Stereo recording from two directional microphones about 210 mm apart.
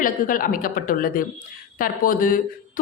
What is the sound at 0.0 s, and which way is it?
A man's voice, 40° left (ahead or behind).